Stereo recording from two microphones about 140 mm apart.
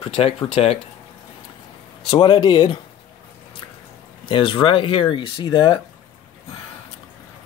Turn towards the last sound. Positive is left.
turn(degrees=35)  # may be behind; listen again after turning